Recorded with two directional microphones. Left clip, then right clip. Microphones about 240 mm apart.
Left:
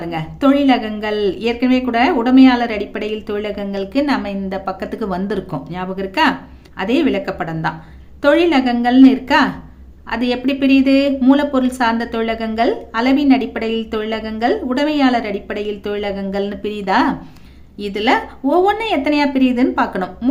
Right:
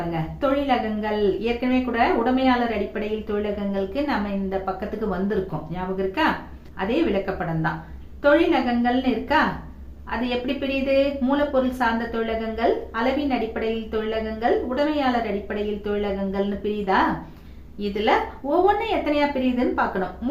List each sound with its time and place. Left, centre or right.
0.1 s a woman's voice: left